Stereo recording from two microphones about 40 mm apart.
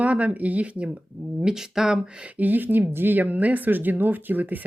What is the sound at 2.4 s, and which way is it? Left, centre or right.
Speech, right.